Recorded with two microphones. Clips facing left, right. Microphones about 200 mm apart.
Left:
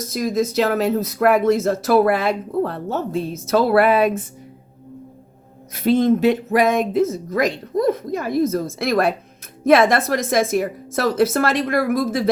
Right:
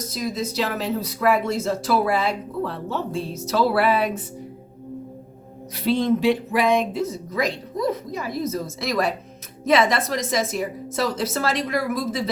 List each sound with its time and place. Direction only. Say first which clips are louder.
0.1 s speech: left 8 dB; 50° left (ahead or behind)
5.7 s speech: left 4 dB; 50° left (ahead or behind)